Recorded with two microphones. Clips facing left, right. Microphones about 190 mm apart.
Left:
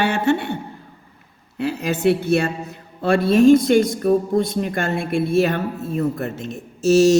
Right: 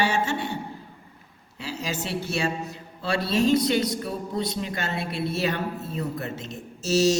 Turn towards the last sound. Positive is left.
turn(degrees=55)  # may be behind; listen again after turning